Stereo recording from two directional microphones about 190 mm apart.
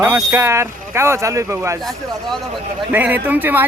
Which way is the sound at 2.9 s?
10° right (ahead or behind).